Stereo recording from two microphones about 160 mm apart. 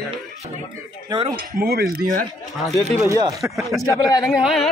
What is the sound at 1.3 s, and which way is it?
Speech, 70° right (ahead or behind).